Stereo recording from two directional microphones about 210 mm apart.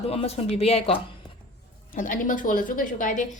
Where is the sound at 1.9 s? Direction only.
40° left (ahead or behind).